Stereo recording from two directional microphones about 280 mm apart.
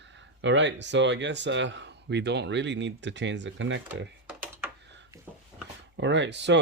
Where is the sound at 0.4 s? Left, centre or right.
Right.